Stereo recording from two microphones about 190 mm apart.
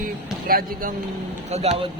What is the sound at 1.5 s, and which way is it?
Speech, 35° right (ahead or behind).